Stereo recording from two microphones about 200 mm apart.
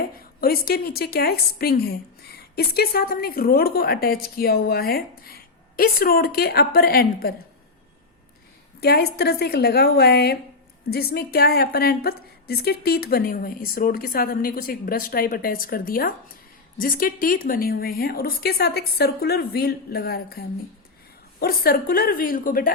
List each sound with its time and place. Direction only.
0.0 s a woman's voice: 50° left (ahead or behind)
8.8 s a woman's voice: 50° left (ahead or behind)